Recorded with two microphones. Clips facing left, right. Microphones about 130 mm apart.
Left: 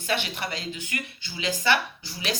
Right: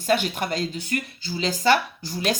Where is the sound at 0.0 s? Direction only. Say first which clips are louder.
Right 6 dB; 45° right (ahead or behind).